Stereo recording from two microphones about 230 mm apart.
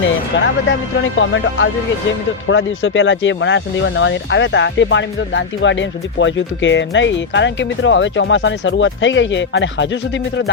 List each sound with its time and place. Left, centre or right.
0.3 s speech: left